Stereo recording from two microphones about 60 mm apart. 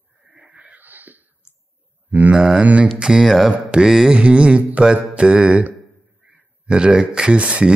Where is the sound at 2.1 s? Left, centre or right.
Right.